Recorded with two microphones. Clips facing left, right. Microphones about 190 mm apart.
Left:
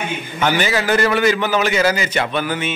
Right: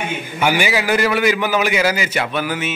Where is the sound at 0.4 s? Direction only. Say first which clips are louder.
Even; 10° right (ahead or behind).